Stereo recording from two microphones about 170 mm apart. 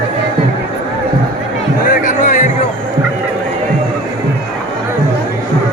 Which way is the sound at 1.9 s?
50° left (ahead or behind).